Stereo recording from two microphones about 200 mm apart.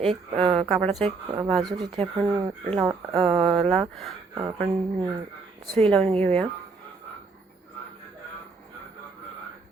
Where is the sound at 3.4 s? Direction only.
Centre (ahead or behind).